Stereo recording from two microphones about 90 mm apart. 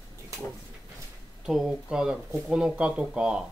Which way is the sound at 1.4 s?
5° right (ahead or behind).